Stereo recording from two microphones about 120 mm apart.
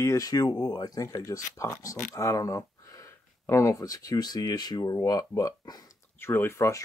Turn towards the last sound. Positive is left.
turn(degrees=25)  # may be behind; listen again after turning